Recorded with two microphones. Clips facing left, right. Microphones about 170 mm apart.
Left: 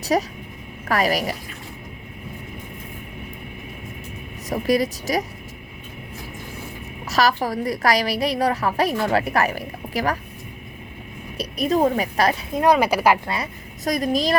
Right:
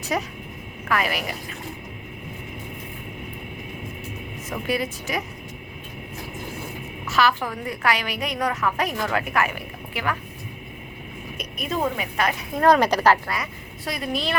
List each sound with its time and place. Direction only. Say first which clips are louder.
0.0 s a woman's voice: left 5 dB; 35° left (ahead or behind)
4.4 s a woman's voice: left 6 dB; 35° left (ahead or behind)
7.0 s a woman's voice: left 2 dB; 40° left (ahead or behind)
11.3 s a woman's voice: left 7 dB; 35° left (ahead or behind)
12.5 s speech: right 1 dB; 10° left (ahead or behind)
13.2 s a woman's voice: left 2 dB; 25° left (ahead or behind)
13.8 s a woman's voice: left 6 dB; 40° left (ahead or behind)